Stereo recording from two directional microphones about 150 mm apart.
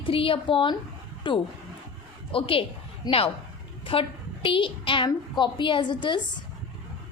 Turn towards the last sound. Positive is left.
turn(degrees=30)  # may be behind; listen again after turning